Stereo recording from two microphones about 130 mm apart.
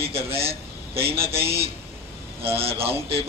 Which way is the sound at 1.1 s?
20° right (ahead or behind).